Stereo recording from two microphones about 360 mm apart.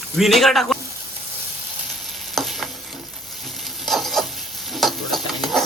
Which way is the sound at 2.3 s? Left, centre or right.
Centre.